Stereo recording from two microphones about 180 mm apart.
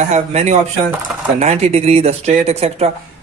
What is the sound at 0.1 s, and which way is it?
Speech, 40° right (ahead or behind).